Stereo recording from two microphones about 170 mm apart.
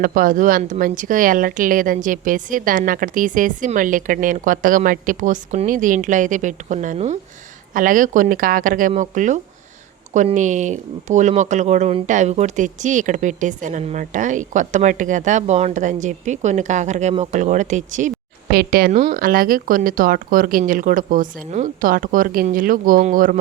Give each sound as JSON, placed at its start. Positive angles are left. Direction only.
{"t": 0.0, "sound": "speech", "side_deg": -55}
{"t": 7.7, "sound": "speech", "side_deg": -55}
{"t": 18.5, "sound": "speech", "side_deg": -55}